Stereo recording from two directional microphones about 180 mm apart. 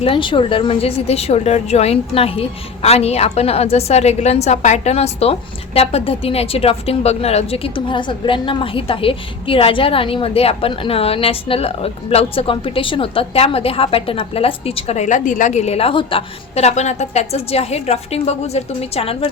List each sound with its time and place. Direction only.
0.0 s a woman's voice: 30° left (ahead or behind)